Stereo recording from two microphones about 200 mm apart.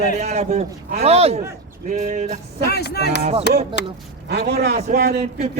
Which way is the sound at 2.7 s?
55° left (ahead or behind).